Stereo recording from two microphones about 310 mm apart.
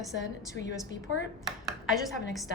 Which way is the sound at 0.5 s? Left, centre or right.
Left.